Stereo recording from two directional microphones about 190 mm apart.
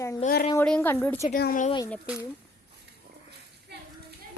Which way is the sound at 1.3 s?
50° left (ahead or behind).